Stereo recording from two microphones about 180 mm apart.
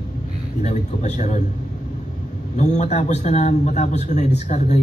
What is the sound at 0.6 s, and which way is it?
Speech, 40° left (ahead or behind).